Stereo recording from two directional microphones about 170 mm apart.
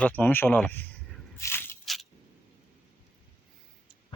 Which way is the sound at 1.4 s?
15° left (ahead or behind).